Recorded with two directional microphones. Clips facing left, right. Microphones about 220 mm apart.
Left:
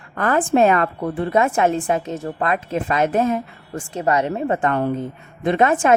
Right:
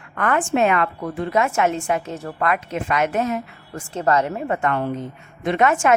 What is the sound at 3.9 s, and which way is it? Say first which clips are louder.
Speech: even; 15° left (ahead or behind).